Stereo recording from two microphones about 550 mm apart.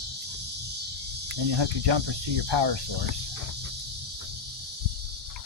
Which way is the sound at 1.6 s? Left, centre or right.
Right.